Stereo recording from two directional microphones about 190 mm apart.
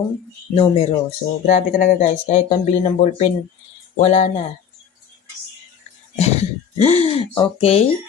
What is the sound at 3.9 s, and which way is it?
Speech, 35° left (ahead or behind).